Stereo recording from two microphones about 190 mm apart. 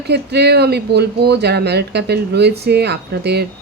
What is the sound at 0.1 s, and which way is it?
Speech, 60° right (ahead or behind).